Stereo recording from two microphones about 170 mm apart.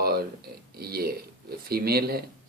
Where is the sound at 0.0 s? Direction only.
65° right (ahead or behind).